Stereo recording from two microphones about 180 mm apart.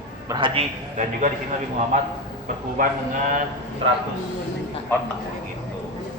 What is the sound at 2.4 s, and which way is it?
Speech, 45° right (ahead or behind).